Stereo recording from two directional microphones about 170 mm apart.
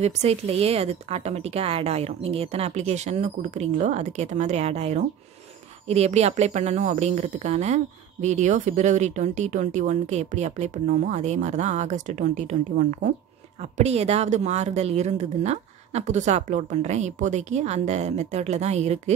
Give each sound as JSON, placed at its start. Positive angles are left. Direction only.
{"t": 0.0, "sound": "a woman's voice", "side_deg": -40}